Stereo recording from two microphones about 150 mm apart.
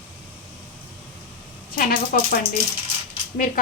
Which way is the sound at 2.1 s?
65° left (ahead or behind).